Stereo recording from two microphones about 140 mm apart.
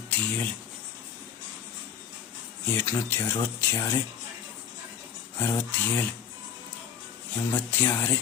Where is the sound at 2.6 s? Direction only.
15° left (ahead or behind).